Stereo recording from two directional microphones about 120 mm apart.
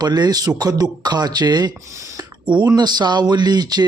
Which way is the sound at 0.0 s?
35° right (ahead or behind).